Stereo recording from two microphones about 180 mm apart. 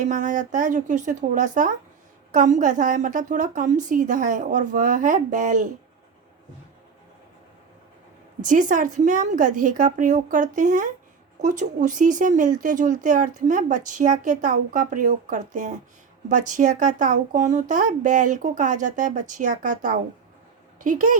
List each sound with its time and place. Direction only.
0.0 s speech: 45° right (ahead or behind)
8.4 s speech: 45° right (ahead or behind)